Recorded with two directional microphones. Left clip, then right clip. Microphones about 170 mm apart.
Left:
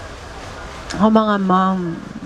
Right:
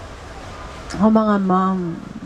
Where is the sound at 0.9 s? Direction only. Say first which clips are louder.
Left 2 dB; 20° left (ahead or behind).